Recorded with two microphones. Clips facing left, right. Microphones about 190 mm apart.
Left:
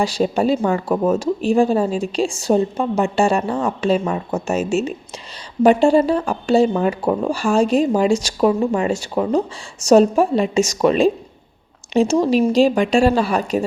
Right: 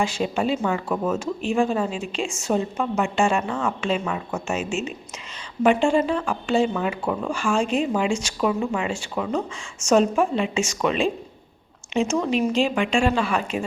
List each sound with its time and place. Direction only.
0.0 s speech: 35° left (ahead or behind)